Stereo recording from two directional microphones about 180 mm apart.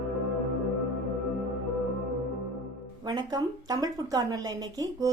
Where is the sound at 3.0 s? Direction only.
25° right (ahead or behind).